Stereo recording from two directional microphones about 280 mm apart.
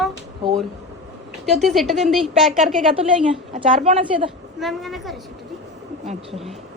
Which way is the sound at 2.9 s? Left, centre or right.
Centre.